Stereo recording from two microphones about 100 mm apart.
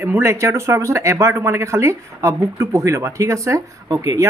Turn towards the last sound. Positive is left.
turn(degrees=-35)  # may be behind; listen again after turning